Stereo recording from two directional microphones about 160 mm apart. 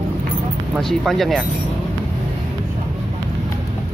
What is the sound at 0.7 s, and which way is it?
Speech, centre (ahead or behind).